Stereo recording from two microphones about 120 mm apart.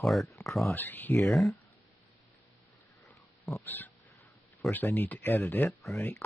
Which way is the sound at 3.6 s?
15° left (ahead or behind).